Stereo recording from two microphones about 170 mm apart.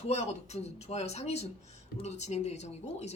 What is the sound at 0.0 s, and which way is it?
Speech, 40° left (ahead or behind).